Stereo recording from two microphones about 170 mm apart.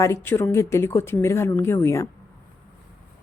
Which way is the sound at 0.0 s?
15° left (ahead or behind).